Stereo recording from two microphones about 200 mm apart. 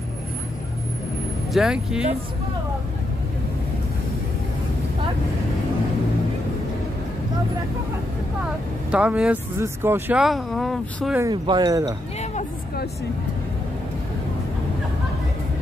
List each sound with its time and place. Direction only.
1.5 s speech: centre (ahead or behind)
8.9 s speech: 5° right (ahead or behind)
11.1 s speech: 20° right (ahead or behind)